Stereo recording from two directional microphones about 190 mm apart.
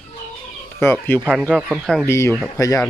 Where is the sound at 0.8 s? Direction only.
10° left (ahead or behind).